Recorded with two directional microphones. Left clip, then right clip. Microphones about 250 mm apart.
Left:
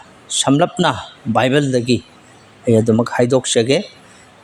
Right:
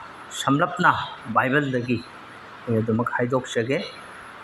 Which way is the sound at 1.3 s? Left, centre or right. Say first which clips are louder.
Left 6 dB; left.